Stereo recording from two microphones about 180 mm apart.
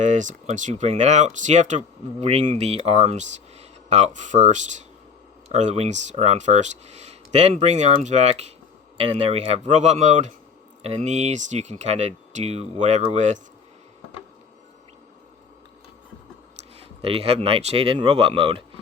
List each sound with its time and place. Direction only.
0.0 s speech: 40° right (ahead or behind)
17.0 s speech: 35° right (ahead or behind)